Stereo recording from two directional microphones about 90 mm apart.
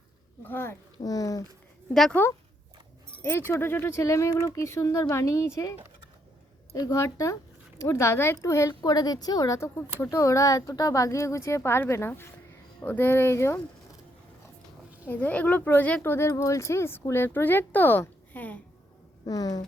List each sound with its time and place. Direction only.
0.4 s speech: 25° left (ahead or behind)
1.0 s speech: 40° left (ahead or behind)
1.9 s a woman's voice: 5° left (ahead or behind)
3.2 s speech: 25° left (ahead or behind)
6.7 s a woman's voice: 45° left (ahead or behind)
7.0 s speech: 35° left (ahead or behind)
8.8 s a woman's voice: 45° left (ahead or behind); by 13.6 s 30° left (ahead or behind)
15.0 s speech: 15° left (ahead or behind)
19.3 s a woman's voice: 45° left (ahead or behind)